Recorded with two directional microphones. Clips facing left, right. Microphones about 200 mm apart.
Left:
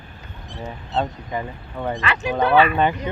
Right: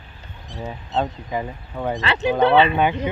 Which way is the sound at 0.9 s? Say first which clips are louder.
Right 1 dB; 5° right (ahead or behind).